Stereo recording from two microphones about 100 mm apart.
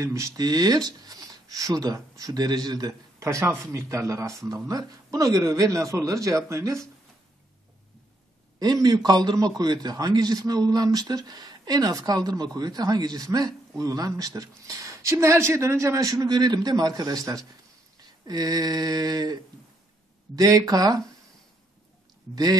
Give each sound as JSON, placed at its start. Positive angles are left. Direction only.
{"t": 0.0, "sound": "a man's voice", "side_deg": -30}
{"t": 8.8, "sound": "a man's voice", "side_deg": -40}
{"t": 22.3, "sound": "a man's voice", "side_deg": -40}